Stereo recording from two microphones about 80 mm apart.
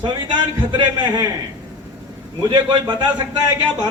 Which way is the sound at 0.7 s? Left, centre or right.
Right.